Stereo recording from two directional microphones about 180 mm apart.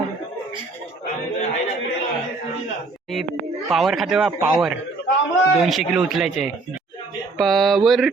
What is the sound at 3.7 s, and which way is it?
Mantra, centre (ahead or behind).